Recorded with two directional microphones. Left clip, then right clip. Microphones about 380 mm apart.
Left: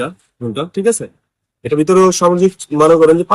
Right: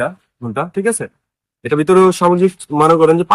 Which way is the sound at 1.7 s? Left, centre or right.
Right.